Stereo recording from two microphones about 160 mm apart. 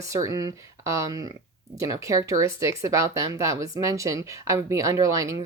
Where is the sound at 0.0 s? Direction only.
20° right (ahead or behind).